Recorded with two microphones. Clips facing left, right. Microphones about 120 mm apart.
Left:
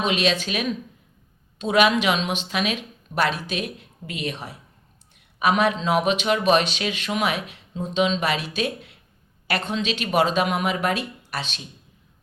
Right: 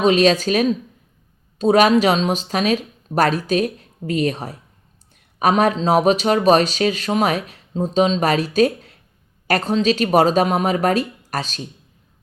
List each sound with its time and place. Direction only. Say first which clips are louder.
0.0 s speech: right 8 dB; 40° right (ahead or behind)